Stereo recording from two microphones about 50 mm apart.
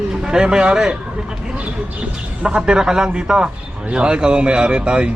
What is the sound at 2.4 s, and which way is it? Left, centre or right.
A man's voice, centre.